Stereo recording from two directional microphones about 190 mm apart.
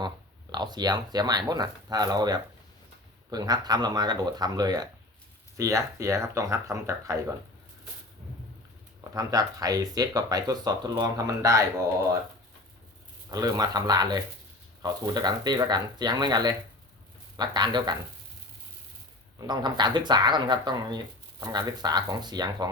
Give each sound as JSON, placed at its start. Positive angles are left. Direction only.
{"t": 0.5, "sound": "speech", "side_deg": -20}
{"t": 9.1, "sound": "speech", "side_deg": -20}
{"t": 13.3, "sound": "speech", "side_deg": -20}
{"t": 19.4, "sound": "speech", "side_deg": -20}